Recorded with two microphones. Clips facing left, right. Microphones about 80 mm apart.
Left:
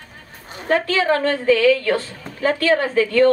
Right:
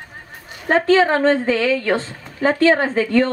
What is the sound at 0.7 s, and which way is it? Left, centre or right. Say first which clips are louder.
A woman's voice: right 3 dB; right.